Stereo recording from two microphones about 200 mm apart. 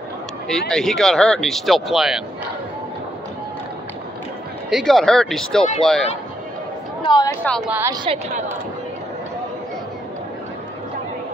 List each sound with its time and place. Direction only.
0.5 s speech: centre (ahead or behind)
4.6 s speech: centre (ahead or behind)
7.0 s speech: 20° left (ahead or behind)
7.7 s a woman's voice: 15° right (ahead or behind)